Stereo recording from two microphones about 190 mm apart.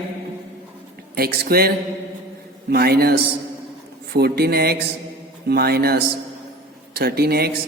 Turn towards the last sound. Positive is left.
turn(degrees=-55)  # may be behind; listen again after turning